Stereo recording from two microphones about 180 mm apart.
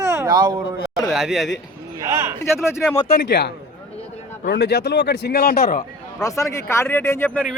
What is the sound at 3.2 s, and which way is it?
Speech, 75° left (ahead or behind).